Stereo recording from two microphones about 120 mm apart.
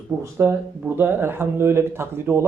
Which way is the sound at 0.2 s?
20° right (ahead or behind).